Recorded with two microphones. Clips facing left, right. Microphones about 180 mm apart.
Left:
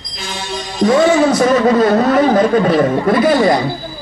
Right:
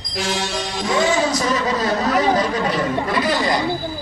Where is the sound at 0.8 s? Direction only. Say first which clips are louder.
Left 9 dB; 55° left (ahead or behind).